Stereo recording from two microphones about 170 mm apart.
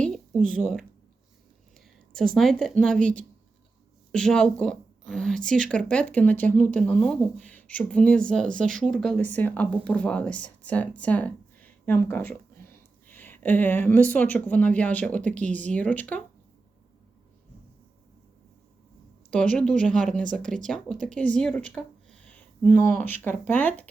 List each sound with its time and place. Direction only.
0.0 s a sound: 5° left (ahead or behind)
2.3 s speech: centre (ahead or behind)
4.1 s a woman's voice: 5° left (ahead or behind)
19.3 s speech: 5° left (ahead or behind)
20.4 s speech: 50° right (ahead or behind)
20.7 s speech: 5° left (ahead or behind)
21.8 s a sound: 5° left (ahead or behind)
23.5 s speech: 10° left (ahead or behind)